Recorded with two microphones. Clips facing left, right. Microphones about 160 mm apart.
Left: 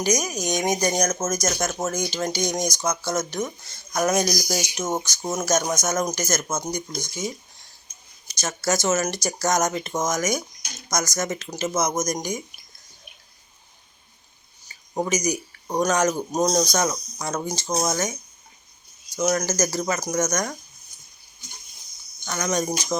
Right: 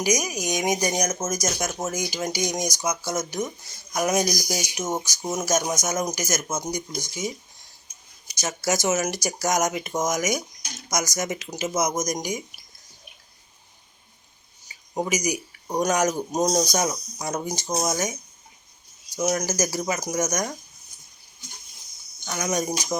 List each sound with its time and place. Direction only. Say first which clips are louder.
0.0 s speech: left 1 dB; 15° right (ahead or behind)
14.7 s a sound: left 1 dB; 15° right (ahead or behind)
15.8 s speech: left 1 dB; 15° right (ahead or behind)
17.7 s speech: left 1 dB; centre (ahead or behind)
19.3 s speech: left 2 dB; 15° right (ahead or behind)
22.3 s speech: left 1 dB; 15° right (ahead or behind)